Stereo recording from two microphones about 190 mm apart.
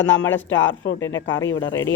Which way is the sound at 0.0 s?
80° left.